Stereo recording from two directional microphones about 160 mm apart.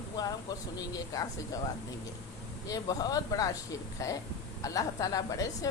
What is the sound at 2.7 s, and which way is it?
Speech, 20° left (ahead or behind).